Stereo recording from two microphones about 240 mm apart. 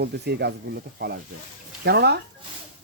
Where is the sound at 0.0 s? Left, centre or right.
Right.